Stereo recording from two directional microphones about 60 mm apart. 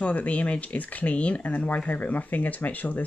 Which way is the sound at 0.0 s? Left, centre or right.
Left.